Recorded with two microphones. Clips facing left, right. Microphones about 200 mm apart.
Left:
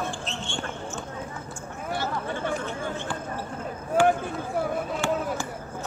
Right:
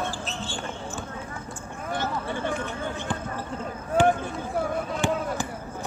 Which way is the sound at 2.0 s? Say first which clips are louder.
Right 1 dB; 20° right (ahead or behind).